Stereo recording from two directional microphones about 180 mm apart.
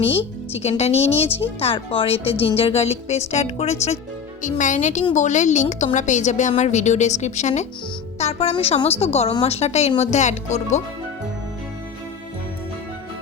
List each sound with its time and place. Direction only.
0.0 s a woman's voice: 30° left (ahead or behind)